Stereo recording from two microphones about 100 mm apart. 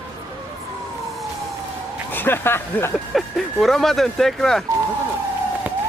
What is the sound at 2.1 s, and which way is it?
Speech, 20° left (ahead or behind).